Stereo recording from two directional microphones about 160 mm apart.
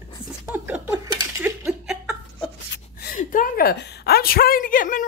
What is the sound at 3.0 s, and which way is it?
A woman's voice, 60° left (ahead or behind).